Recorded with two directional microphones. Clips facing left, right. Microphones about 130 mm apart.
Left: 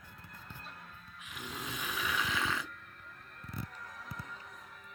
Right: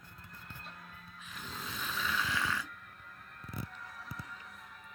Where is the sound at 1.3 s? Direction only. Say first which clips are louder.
Left 2 dB; 15° left (ahead or behind).